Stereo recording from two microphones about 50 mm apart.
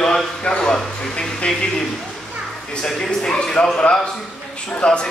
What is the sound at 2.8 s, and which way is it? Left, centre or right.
Speech, centre.